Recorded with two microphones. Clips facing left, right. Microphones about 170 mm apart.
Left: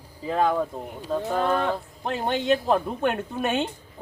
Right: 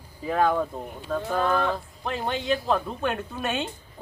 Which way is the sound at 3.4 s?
50° left (ahead or behind).